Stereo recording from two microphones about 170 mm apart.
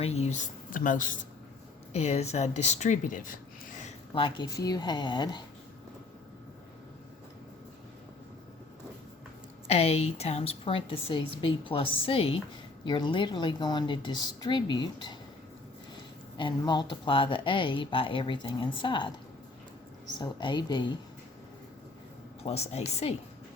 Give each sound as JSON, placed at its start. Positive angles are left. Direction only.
{"t": 0.0, "sound": "speech", "side_deg": 40}
{"t": 1.9, "sound": "speech", "side_deg": 40}
{"t": 3.8, "sound": "speech", "side_deg": 30}
{"t": 9.6, "sound": "a woman's voice", "side_deg": 40}
{"t": 16.4, "sound": "speech", "side_deg": 25}
{"t": 20.1, "sound": "speech", "side_deg": 25}
{"t": 22.4, "sound": "a woman's voice", "side_deg": 40}